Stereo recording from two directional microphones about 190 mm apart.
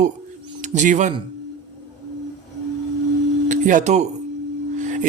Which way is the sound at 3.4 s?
40° right (ahead or behind).